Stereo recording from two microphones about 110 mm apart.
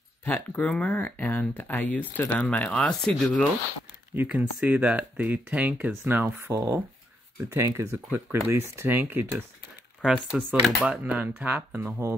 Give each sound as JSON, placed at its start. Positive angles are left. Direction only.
{"t": 0.2, "sound": "speech", "side_deg": 15}
{"t": 4.1, "sound": "speech", "side_deg": -15}
{"t": 10.3, "sound": "speech", "side_deg": -5}